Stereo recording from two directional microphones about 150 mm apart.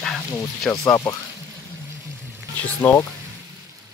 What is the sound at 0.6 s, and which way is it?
Speech, 5° left (ahead or behind).